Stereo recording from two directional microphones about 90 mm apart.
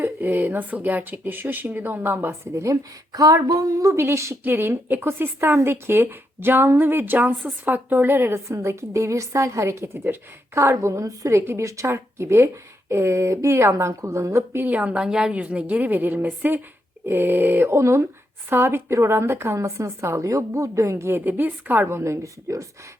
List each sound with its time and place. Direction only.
0.0 s speech: 20° right (ahead or behind)
2.6 s speech: 45° right (ahead or behind)
14.6 s a woman's voice: 15° right (ahead or behind); by 22.6 s 35° right (ahead or behind)